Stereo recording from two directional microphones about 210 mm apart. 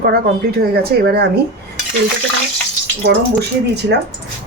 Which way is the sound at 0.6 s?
45° right (ahead or behind).